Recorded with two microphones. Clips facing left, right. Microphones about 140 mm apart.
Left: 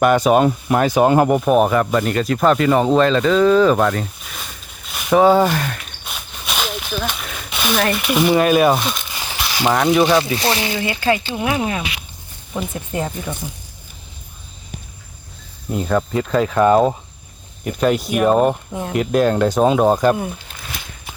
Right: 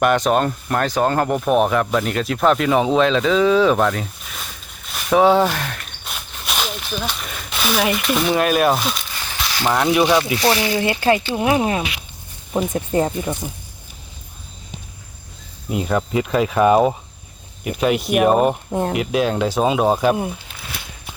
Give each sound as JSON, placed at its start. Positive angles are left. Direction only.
{"t": 0.0, "sound": "speech", "side_deg": 5}
{"t": 9.1, "sound": "a sound", "side_deg": 15}
{"t": 9.7, "sound": "speech", "side_deg": 0}
{"t": 10.8, "sound": "speech", "side_deg": -35}
{"t": 15.7, "sound": "speech", "side_deg": -10}
{"t": 17.6, "sound": "speech", "side_deg": -5}
{"t": 18.7, "sound": "speech", "side_deg": -45}
{"t": 18.9, "sound": "speech", "side_deg": 0}